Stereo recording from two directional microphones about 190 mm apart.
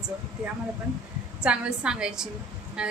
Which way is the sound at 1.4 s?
5° right (ahead or behind).